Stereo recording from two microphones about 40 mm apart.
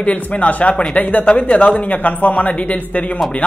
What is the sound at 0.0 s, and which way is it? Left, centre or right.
Speech, left.